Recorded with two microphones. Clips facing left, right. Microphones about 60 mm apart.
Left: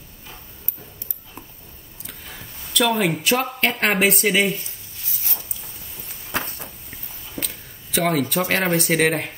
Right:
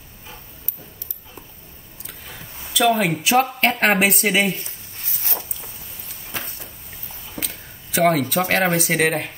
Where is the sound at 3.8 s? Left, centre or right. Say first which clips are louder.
Right 2 dB; centre.